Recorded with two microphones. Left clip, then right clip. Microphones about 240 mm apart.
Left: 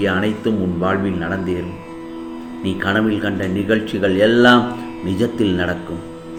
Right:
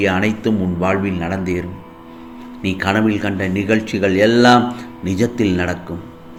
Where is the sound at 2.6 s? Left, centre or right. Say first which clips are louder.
Right 1 dB; right.